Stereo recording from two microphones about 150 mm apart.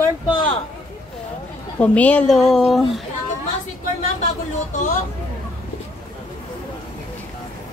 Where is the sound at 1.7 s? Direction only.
10° left (ahead or behind).